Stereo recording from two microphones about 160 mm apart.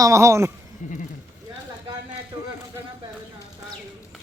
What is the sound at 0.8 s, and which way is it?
Speech, 50° left (ahead or behind).